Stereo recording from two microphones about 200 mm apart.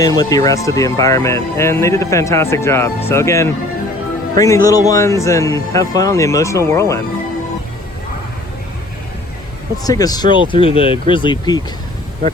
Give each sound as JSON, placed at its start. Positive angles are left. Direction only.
{"t": 0.0, "sound": "speech", "side_deg": 20}
{"t": 9.8, "sound": "speech", "side_deg": 20}